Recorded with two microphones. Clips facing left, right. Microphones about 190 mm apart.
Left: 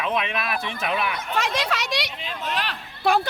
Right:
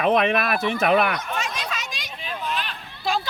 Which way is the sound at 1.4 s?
70° left (ahead or behind).